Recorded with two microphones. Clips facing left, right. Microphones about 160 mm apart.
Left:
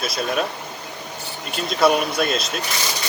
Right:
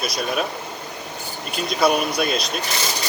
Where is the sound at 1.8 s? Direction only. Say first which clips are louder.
Left 1 dB; centre (ahead or behind).